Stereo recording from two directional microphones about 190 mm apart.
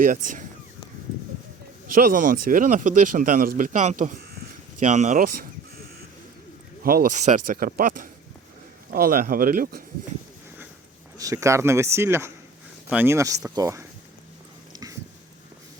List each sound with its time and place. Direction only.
0.0 s speech: 45° right (ahead or behind)
1.9 s speech: 50° right (ahead or behind)
6.8 s speech: 50° right (ahead or behind)
11.2 s speech: 15° right (ahead or behind)
14.7 s a sound: 20° right (ahead or behind)